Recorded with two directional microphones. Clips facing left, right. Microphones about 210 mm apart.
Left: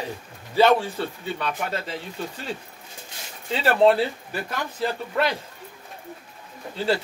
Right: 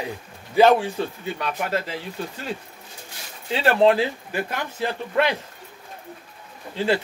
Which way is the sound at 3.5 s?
10° right (ahead or behind).